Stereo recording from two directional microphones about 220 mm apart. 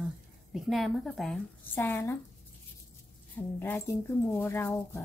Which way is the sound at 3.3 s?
10° left (ahead or behind).